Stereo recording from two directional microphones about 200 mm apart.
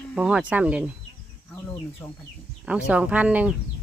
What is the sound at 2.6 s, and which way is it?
Speech, 5° right (ahead or behind).